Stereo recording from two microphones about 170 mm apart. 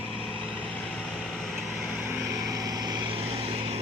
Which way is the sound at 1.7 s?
5° right (ahead or behind).